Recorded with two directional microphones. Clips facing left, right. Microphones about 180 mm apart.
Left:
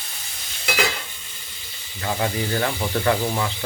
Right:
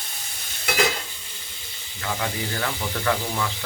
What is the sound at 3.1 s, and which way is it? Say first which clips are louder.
Sizzle: left 3 dB; 30° left (ahead or behind).